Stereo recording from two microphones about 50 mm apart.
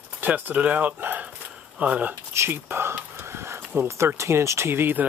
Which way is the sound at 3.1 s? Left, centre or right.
Right.